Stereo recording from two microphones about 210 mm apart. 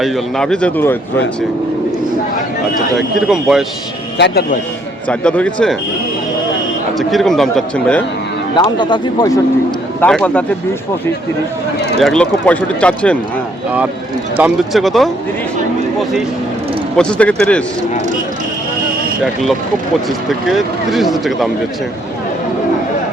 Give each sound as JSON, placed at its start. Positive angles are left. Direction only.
{"t": 0.0, "sound": "speech", "side_deg": 5}
{"t": 2.7, "sound": "speech", "side_deg": 0}
{"t": 4.2, "sound": "speech", "side_deg": 55}
{"t": 5.0, "sound": "speech", "side_deg": 5}
{"t": 7.1, "sound": "speech", "side_deg": 0}
{"t": 8.5, "sound": "speech", "side_deg": 20}
{"t": 10.0, "sound": "speech", "side_deg": 5}
{"t": 11.9, "sound": "speech", "side_deg": 0}
{"t": 14.3, "sound": "speech", "side_deg": -5}
{"t": 17.0, "sound": "speech", "side_deg": 5}
{"t": 19.2, "sound": "speech", "side_deg": 0}